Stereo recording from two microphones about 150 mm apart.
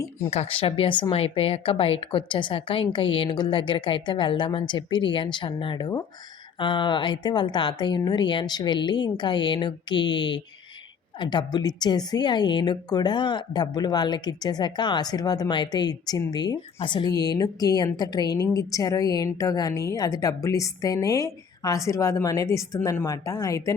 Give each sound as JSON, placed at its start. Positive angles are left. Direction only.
{"t": 0.3, "sound": "speech", "side_deg": 40}